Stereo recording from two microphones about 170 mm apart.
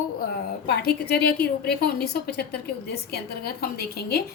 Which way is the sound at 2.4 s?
65° left (ahead or behind).